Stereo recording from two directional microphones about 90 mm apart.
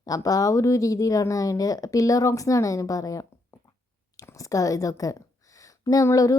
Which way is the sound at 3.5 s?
30° left (ahead or behind).